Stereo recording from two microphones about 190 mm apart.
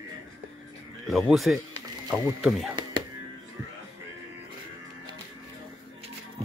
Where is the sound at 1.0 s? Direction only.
Centre (ahead or behind).